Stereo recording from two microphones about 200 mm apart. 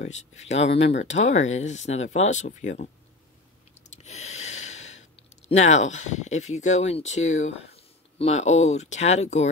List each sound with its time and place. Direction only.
0.5 s speech: 35° left (ahead or behind)
3.9 s a sound: 35° left (ahead or behind)
5.5 s speech: 35° left (ahead or behind)